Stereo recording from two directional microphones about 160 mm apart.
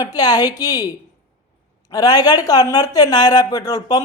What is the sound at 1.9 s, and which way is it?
A man's voice, 25° left (ahead or behind).